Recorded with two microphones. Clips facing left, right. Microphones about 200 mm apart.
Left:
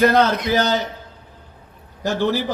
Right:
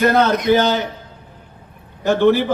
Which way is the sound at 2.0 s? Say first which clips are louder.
Right 6 dB; 60° right (ahead or behind).